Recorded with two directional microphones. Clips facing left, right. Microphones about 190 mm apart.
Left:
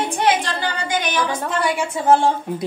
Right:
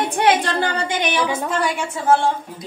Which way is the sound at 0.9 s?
15° right (ahead or behind).